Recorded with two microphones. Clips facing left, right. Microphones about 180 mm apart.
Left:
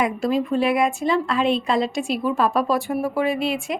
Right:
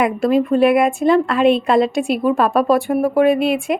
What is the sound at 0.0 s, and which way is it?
A woman's voice, 60° right (ahead or behind).